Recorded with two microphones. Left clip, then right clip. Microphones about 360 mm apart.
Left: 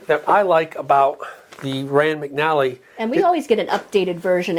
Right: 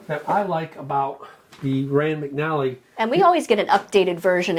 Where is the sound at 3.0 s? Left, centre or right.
Right.